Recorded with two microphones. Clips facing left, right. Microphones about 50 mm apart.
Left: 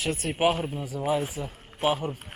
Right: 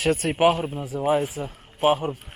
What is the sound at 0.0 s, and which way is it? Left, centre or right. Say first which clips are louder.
Speech: right 7 dB; right.